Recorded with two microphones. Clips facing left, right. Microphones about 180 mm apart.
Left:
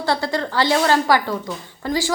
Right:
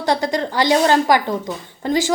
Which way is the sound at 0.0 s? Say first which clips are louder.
Right 2 dB; 15° right (ahead or behind).